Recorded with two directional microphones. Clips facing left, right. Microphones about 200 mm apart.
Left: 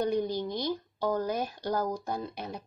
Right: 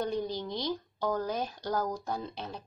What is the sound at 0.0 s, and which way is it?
Speech, 15° left (ahead or behind).